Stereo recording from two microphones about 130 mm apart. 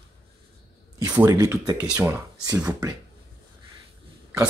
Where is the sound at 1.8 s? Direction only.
10° right (ahead or behind).